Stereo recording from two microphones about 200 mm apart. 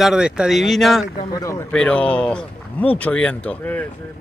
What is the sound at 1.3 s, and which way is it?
Speech, 15° left (ahead or behind).